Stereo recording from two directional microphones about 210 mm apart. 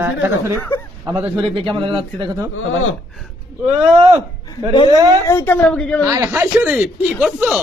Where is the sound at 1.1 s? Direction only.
15° right (ahead or behind).